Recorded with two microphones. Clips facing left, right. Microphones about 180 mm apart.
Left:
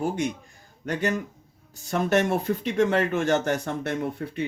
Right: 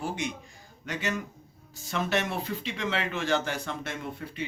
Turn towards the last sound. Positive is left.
turn(degrees=60)  # may be behind; listen again after turning